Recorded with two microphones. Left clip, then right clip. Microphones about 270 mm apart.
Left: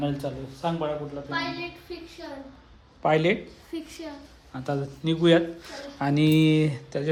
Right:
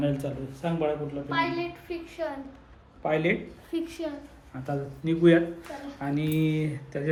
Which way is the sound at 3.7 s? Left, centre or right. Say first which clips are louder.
Right 5 dB; centre.